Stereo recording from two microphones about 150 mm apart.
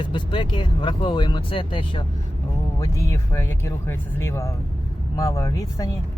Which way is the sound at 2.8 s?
20° left (ahead or behind).